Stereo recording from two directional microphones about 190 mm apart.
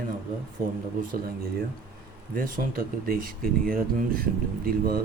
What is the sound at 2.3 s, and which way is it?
Speech, 45° right (ahead or behind).